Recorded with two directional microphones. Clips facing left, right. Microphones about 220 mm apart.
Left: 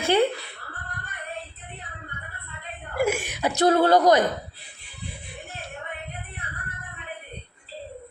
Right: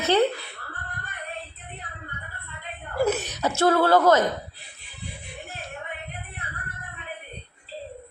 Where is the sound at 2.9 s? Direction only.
10° left (ahead or behind).